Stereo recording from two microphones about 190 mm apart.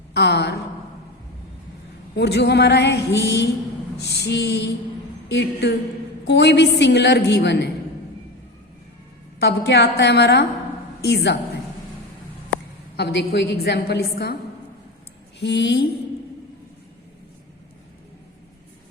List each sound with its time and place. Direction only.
0.1 s a woman's voice: 65° left (ahead or behind)
2.1 s a woman's voice: 60° left (ahead or behind)
9.4 s a woman's voice: 60° left (ahead or behind)
13.0 s a woman's voice: 60° left (ahead or behind)
15.4 s a woman's voice: 65° left (ahead or behind)